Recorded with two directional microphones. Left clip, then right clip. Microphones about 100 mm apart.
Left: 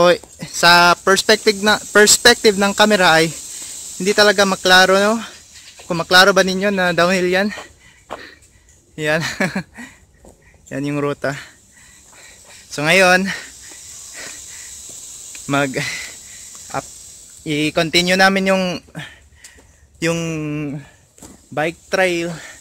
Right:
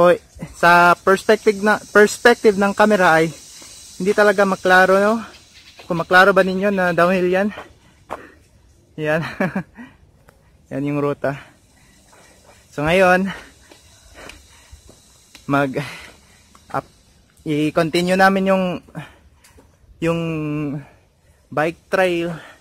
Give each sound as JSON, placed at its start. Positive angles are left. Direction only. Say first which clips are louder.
{"t": 0.0, "sound": "speech", "louder": "even", "side_deg": 15}
{"t": 8.9, "sound": "speech", "louder": "left 2 dB", "side_deg": 10}
{"t": 10.7, "sound": "cattle", "louder": "even", "side_deg": 5}
{"t": 12.2, "sound": "a sound", "louder": "left 7 dB", "side_deg": 0}
{"t": 15.4, "sound": "cattle", "louder": "left 1 dB", "side_deg": -5}
{"t": 17.5, "sound": "cattle", "louder": "left 1 dB", "side_deg": -15}
{"t": 21.5, "sound": "cattle", "louder": "even", "side_deg": -10}